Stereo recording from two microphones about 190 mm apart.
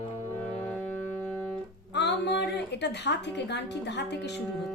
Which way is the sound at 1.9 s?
65° left (ahead or behind).